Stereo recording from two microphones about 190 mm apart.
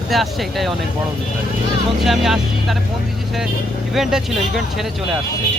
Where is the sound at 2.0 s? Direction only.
Centre (ahead or behind).